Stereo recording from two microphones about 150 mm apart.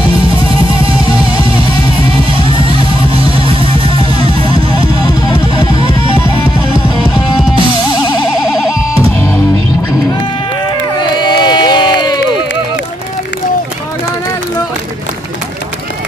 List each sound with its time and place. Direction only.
5.8 s music: 35° right (ahead or behind)
10.7 s crowd: 30° left (ahead or behind)